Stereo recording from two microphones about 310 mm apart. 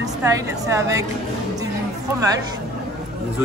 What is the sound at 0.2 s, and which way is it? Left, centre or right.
Speech, centre.